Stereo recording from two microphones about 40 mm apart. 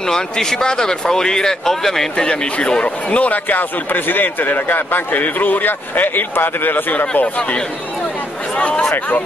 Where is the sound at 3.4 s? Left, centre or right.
Left.